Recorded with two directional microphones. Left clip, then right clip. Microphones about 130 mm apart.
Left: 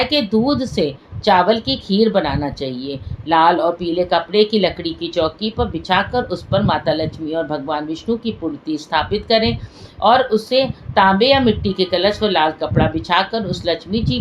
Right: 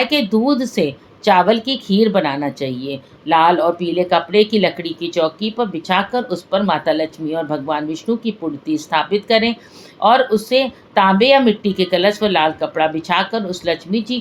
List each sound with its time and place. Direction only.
0.0 s a woman's voice: 45° right (ahead or behind)